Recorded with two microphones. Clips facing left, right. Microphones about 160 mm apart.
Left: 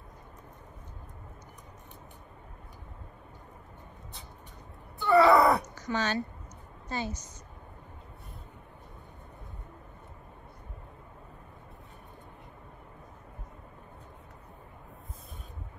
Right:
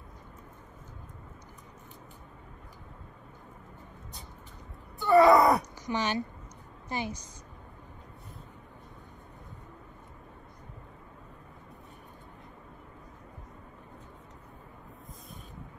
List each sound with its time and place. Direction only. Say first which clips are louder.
5.0 s groan: right 1 dB; 20° right (ahead or behind)
5.8 s a woman's voice: even; 15° right (ahead or behind)